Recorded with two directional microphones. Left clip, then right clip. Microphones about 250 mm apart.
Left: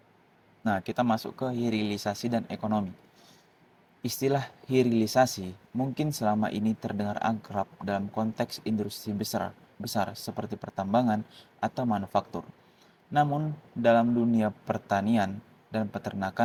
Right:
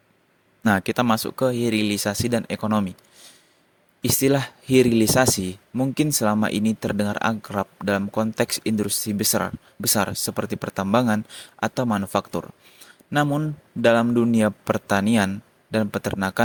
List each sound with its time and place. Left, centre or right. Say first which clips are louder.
0.6 s speech: right 7 dB; right
4.0 s speech: right 7 dB; right
12.8 s a sound: right 3 dB; right
13.8 s speech: right 5 dB; right